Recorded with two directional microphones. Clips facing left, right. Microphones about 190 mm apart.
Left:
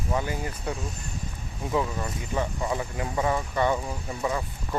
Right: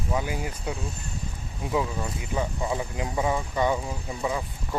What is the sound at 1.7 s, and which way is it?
Speech, 10° right (ahead or behind).